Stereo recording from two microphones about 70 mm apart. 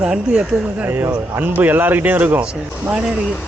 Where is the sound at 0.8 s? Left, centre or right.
Right.